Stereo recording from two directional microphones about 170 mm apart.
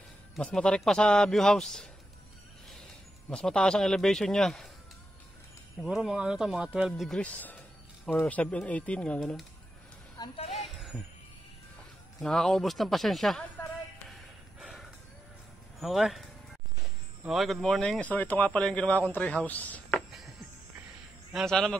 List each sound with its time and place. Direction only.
0.4 s a man's voice: 5° left (ahead or behind)
5.8 s a man's voice: centre (ahead or behind)
10.1 s a sound: 25° left (ahead or behind)
10.5 s music: centre (ahead or behind)
12.2 s a man's voice: centre (ahead or behind)
14.6 s gasp: centre (ahead or behind)
15.8 s a man's voice: centre (ahead or behind)
20.1 s music: centre (ahead or behind)
21.3 s a man's voice: centre (ahead or behind)